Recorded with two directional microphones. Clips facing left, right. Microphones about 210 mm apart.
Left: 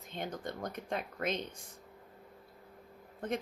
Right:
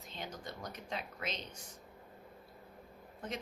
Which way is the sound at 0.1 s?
55° left (ahead or behind).